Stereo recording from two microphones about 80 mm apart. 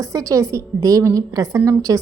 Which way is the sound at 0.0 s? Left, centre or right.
Right.